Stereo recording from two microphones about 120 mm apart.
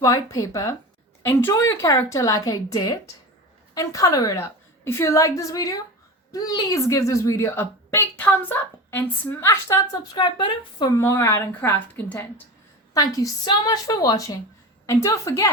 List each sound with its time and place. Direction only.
0.0 s a woman's voice: 30° left (ahead or behind)
10.2 s a woman's voice: 40° left (ahead or behind)
10.9 s a woman's voice: 25° left (ahead or behind)
12.9 s a woman's voice: 30° left (ahead or behind)